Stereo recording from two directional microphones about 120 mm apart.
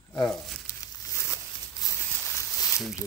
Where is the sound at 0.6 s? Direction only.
30° left (ahead or behind).